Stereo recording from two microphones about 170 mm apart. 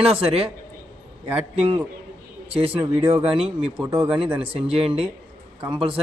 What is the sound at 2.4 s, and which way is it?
Speech, 35° right (ahead or behind).